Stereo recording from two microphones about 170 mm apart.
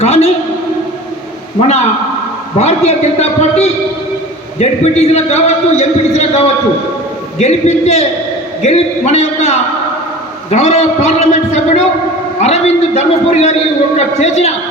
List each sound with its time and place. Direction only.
0.0 s a man's voice: 40° left (ahead or behind)
2.6 s a man's voice: 40° left (ahead or behind)